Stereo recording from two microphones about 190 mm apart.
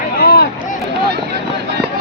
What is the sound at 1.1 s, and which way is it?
Vehicle, 60° right (ahead or behind).